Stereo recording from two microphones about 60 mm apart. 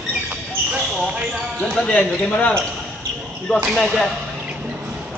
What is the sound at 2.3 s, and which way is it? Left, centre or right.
Speech, left.